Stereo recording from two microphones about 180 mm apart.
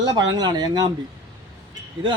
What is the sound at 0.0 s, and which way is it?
Speech, 25° right (ahead or behind).